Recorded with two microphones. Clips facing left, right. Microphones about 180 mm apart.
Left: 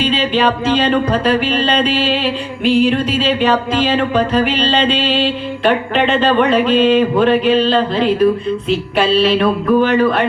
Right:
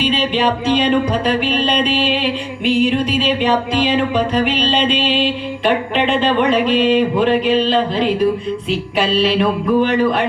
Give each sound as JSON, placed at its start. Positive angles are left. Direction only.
{"t": 0.0, "sound": "music", "side_deg": -10}